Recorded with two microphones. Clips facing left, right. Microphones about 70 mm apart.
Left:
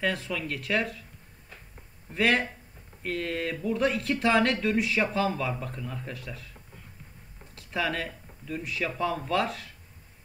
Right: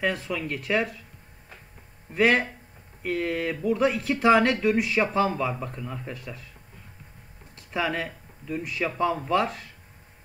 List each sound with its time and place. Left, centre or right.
0.0 s speech: centre
0.3 s speech: centre
0.6 s speech: centre
2.1 s speech: centre
7.5 s a sound: centre
9.0 s speech: centre